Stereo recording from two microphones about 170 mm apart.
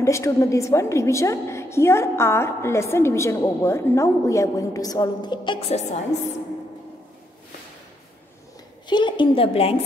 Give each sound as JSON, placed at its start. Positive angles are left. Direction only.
{"t": 0.0, "sound": "a woman's voice", "side_deg": 15}
{"t": 8.8, "sound": "a woman's voice", "side_deg": 25}